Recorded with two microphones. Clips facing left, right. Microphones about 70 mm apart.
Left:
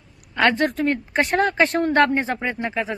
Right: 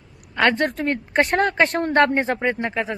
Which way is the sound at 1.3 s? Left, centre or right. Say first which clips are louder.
Left 3 dB; right.